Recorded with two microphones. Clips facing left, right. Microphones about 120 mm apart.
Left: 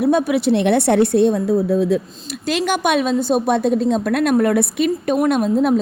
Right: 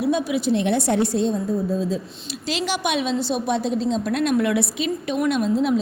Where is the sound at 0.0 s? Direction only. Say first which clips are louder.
Left 5 dB; 55° left (ahead or behind).